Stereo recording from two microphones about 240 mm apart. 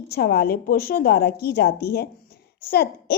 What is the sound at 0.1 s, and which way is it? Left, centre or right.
A woman's voice, left.